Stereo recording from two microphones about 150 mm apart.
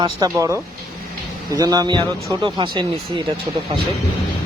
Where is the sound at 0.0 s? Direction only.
25° right (ahead or behind).